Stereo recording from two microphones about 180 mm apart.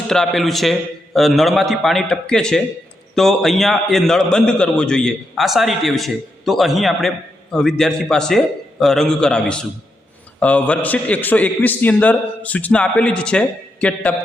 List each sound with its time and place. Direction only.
0.1 s a man's voice: centre (ahead or behind)